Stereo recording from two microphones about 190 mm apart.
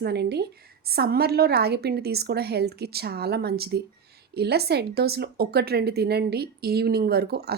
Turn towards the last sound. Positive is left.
turn(degrees=-55)  # may be behind; listen again after turning